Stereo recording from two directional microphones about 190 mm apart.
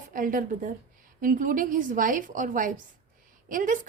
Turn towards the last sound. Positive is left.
turn(degrees=-45)  # may be behind; listen again after turning